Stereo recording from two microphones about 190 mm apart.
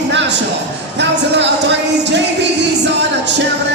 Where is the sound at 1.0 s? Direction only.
65° right (ahead or behind).